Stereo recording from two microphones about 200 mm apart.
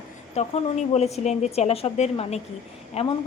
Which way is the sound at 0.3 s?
35° left (ahead or behind).